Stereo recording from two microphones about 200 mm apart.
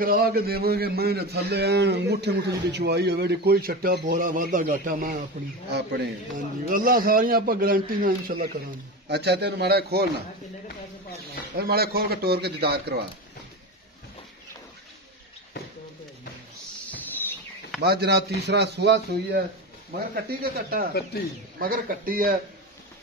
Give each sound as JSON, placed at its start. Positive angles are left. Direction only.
{"t": 0.0, "sound": "a man's voice", "side_deg": -45}
{"t": 5.7, "sound": "a man's voice", "side_deg": -55}
{"t": 9.1, "sound": "a man's voice", "side_deg": -55}
{"t": 11.5, "sound": "a man's voice", "side_deg": -50}
{"t": 17.8, "sound": "a man's voice", "side_deg": -55}
{"t": 21.1, "sound": "speech", "side_deg": 50}
{"t": 21.5, "sound": "a man's voice", "side_deg": -45}